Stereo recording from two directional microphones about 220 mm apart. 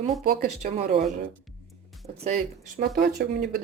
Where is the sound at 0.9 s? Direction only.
25° right (ahead or behind).